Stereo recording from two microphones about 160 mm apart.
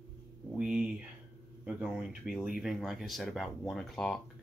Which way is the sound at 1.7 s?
5° right (ahead or behind).